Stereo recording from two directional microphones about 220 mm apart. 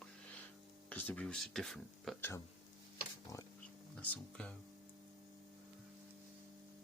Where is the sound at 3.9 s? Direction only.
5° left (ahead or behind).